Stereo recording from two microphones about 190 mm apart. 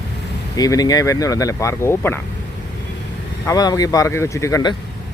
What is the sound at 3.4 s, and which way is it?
Speech, 20° left (ahead or behind).